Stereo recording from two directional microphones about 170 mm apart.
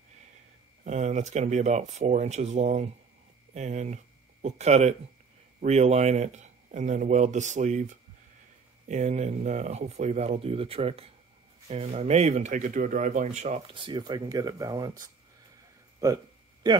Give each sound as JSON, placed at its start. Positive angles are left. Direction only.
{"t": 0.8, "sound": "speech", "side_deg": -45}
{"t": 13.7, "sound": "speech", "side_deg": -30}